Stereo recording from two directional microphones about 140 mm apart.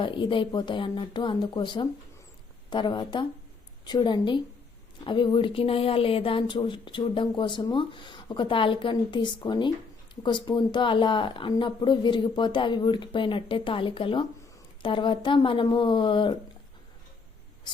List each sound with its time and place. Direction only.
0.0 s speech: 35° left (ahead or behind)